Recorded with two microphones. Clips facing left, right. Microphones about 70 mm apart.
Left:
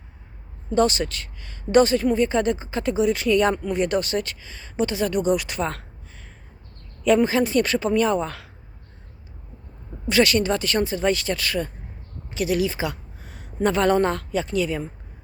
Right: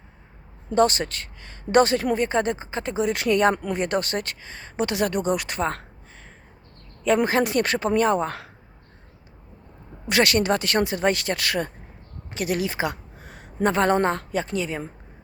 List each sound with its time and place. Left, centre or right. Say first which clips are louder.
0.7 s speech: even; right
2.9 s speech: left 2 dB; right
4.9 s speech: right 1 dB; right
5.1 s speech: left 2 dB; right
7.2 s speech: left 1 dB; right
10.1 s speech: left 1 dB; right
12.3 s a woman's voice: left 3 dB; right
14.3 s a woman's voice: left 3 dB; right